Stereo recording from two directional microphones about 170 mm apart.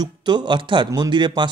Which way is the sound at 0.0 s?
25° right (ahead or behind).